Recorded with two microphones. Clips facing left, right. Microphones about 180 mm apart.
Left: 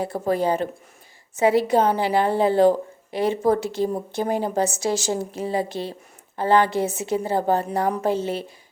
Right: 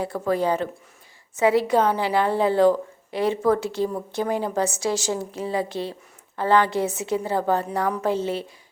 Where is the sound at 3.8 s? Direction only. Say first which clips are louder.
Left 1 dB; 30° left (ahead or behind).